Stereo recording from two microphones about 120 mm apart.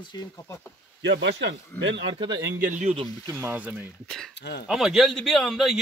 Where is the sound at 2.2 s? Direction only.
35° right (ahead or behind).